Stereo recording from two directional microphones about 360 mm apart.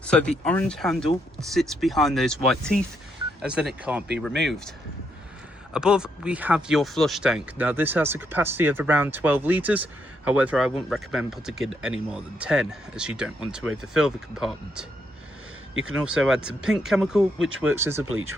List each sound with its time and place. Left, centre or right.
0.0 s speech: centre
5.7 s speech: centre
17.4 s speech: right
17.7 s speech: centre
18.1 s speech: right